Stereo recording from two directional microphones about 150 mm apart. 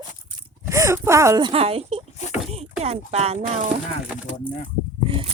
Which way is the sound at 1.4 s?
40° right (ahead or behind).